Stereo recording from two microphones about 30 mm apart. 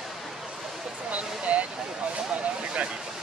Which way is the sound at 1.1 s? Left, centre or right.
Right.